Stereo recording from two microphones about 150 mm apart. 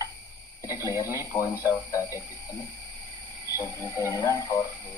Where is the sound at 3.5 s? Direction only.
20° left (ahead or behind).